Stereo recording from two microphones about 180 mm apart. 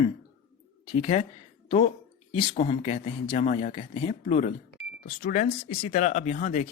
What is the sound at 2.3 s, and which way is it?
Speech, 30° left (ahead or behind).